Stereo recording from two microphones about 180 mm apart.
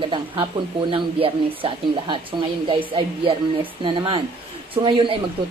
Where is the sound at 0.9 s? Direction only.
30° right (ahead or behind).